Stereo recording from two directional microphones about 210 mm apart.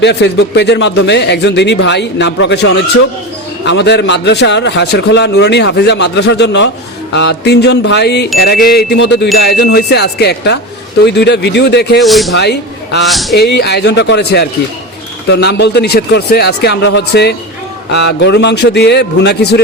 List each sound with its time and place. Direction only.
0.0 s speech: 55° left (ahead or behind)
7.1 s chime: 55° left (ahead or behind)
11.9 s speech: centre (ahead or behind)
12.3 s a man's voice: 55° left (ahead or behind)
13.1 s speech: centre (ahead or behind)
13.3 s chime: 50° left (ahead or behind)